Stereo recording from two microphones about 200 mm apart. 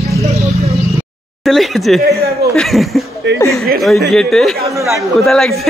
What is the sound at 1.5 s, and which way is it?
Speech, centre (ahead or behind).